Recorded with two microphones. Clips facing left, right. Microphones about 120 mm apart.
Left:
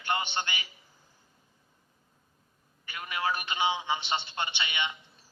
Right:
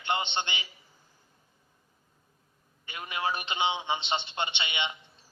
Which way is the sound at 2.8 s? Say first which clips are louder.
Even; 25° right (ahead or behind).